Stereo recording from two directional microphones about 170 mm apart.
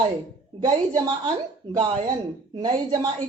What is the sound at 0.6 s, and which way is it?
A woman's voice, 25° right (ahead or behind).